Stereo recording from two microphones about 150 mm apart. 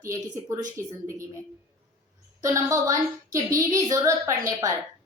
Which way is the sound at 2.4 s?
20° right (ahead or behind).